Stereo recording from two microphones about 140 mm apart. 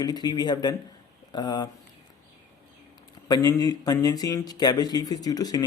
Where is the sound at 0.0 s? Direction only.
30° left (ahead or behind).